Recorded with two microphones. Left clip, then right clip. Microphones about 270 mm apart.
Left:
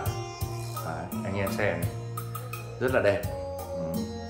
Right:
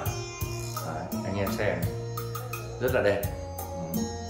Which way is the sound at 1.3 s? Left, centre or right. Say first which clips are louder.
Left 1 dB; centre.